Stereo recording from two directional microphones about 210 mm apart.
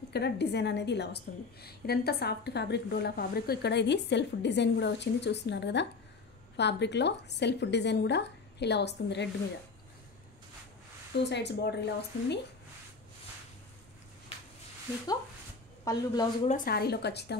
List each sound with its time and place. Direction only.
0.1 s a woman's voice: 50° left (ahead or behind)
11.2 s a woman's voice: 55° left (ahead or behind)
15.8 s speech: 15° left (ahead or behind)
16.4 s a woman's voice: 40° left (ahead or behind)